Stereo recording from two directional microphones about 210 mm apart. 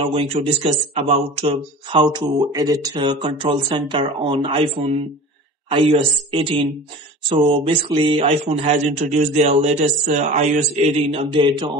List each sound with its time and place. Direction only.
0.0 s speech: 25° right (ahead or behind)
7.3 s speech: 25° right (ahead or behind)